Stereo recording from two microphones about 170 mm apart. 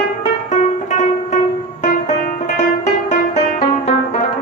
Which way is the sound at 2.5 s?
45° left (ahead or behind).